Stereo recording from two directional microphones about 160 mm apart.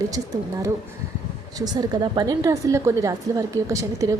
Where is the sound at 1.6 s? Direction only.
25° right (ahead or behind).